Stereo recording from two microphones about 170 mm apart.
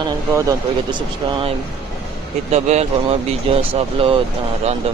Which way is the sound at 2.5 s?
40° right (ahead or behind).